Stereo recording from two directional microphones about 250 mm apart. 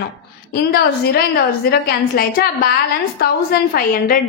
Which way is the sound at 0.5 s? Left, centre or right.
Left.